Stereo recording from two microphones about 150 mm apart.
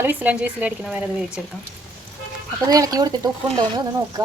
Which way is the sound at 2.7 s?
25° right (ahead or behind).